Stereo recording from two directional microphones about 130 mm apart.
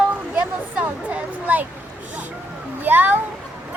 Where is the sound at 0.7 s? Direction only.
10° right (ahead or behind).